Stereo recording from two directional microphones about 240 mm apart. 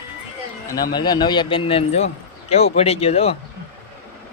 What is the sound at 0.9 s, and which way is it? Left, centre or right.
Speech, centre.